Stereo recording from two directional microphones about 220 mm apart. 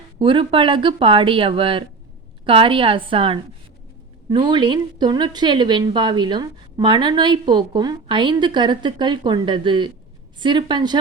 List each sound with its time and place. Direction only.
0.2 s a woman's voice: 25° right (ahead or behind)